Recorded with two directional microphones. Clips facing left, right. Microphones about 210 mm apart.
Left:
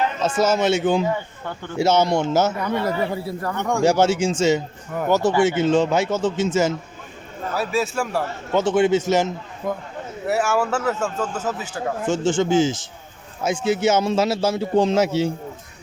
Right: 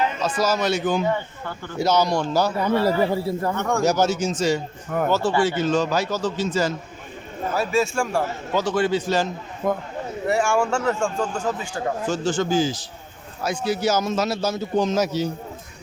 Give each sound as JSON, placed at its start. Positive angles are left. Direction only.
{"t": 0.2, "sound": "speech", "side_deg": 25}
{"t": 2.8, "sound": "a man's voice", "side_deg": -30}
{"t": 3.8, "sound": "speech", "side_deg": 30}
{"t": 7.5, "sound": "a man's voice", "side_deg": 0}
{"t": 8.5, "sound": "speech", "side_deg": 25}
{"t": 9.6, "sound": "a man's voice", "side_deg": -55}
{"t": 10.2, "sound": "a man's voice", "side_deg": 5}
{"t": 12.0, "sound": "speech", "side_deg": 25}